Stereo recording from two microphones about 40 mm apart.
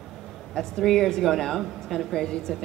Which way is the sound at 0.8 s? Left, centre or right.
Centre.